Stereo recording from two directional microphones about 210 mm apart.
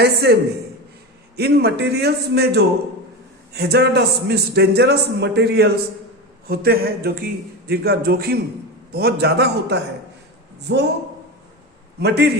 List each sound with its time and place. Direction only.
0.0 s a man's voice: 50° right (ahead or behind)
1.4 s a man's voice: 50° right (ahead or behind)
11.9 s a man's voice: 50° right (ahead or behind)